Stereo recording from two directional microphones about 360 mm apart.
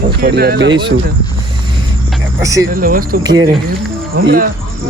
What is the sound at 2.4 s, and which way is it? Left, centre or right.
Speech, centre.